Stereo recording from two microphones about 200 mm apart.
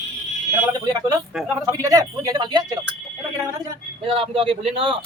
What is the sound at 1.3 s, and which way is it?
Speech, centre (ahead or behind).